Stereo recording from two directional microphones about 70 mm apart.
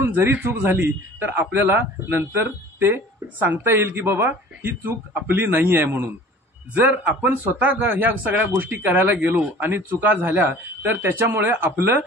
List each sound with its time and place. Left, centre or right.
0.0 s a man's voice: right